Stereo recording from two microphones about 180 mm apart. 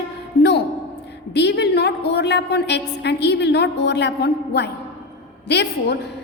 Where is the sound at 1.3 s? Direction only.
70° left (ahead or behind).